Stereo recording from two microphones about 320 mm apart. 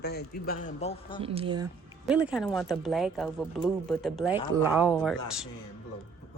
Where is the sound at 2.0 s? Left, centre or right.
Centre.